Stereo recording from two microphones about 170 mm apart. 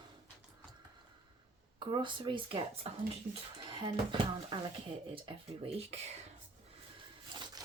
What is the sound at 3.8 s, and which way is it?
Speech, 30° right (ahead or behind).